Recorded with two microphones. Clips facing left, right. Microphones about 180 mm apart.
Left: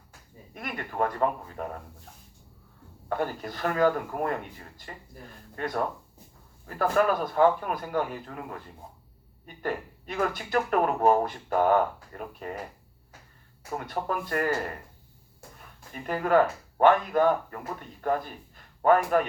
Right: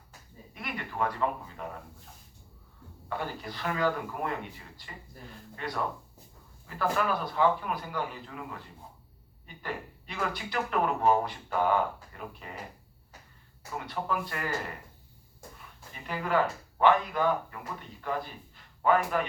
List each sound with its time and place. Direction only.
0.5 s speech: 45° left (ahead or behind)
3.1 s speech: 45° left (ahead or behind)
13.7 s speech: 50° left (ahead or behind)
16.0 s speech: 45° left (ahead or behind)